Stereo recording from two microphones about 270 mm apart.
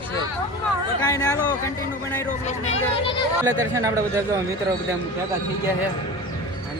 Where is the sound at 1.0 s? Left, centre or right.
Centre.